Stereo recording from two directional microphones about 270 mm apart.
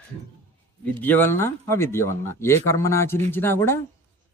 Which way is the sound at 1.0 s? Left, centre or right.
Centre.